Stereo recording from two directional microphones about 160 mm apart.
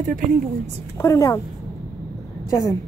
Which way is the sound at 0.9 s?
20° left (ahead or behind).